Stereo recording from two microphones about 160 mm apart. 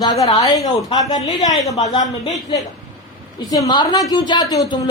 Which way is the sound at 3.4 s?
20° left (ahead or behind).